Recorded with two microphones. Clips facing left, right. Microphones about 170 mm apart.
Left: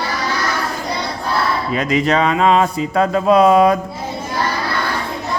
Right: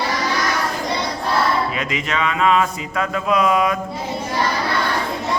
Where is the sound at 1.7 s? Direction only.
35° left (ahead or behind).